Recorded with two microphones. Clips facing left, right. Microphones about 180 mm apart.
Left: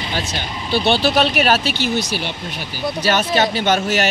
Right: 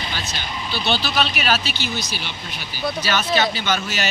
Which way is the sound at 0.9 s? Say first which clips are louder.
Left 6 dB; 60° left (ahead or behind).